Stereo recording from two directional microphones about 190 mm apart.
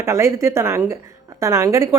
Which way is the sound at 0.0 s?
15° right (ahead or behind).